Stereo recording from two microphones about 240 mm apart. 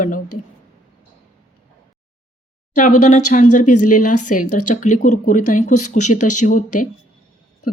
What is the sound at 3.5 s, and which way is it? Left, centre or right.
Speech, left.